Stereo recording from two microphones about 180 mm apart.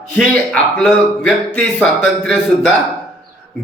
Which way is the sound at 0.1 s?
5° left (ahead or behind).